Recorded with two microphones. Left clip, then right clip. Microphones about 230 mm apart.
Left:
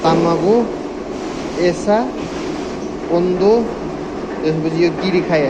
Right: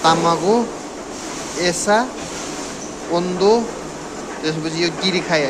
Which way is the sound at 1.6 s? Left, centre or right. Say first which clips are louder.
Left 1 dB; right.